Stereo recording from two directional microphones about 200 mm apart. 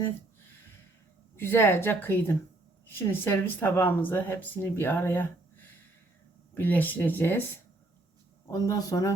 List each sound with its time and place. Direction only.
1.4 s speech: 10° left (ahead or behind)
8.4 s speech: 15° left (ahead or behind)